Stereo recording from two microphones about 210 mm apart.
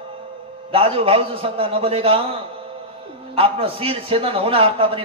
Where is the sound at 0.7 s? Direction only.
25° right (ahead or behind).